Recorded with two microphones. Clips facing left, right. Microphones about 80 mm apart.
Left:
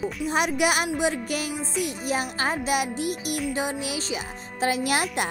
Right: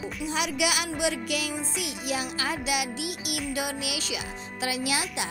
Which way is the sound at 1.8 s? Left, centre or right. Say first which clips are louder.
Left 6 dB; left.